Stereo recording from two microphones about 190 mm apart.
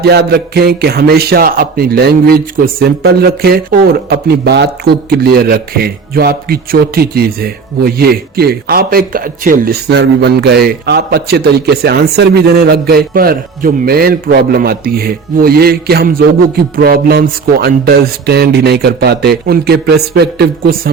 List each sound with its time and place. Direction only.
0.0 s speech: 60° right (ahead or behind)
10.0 s a man's voice: 65° right (ahead or behind)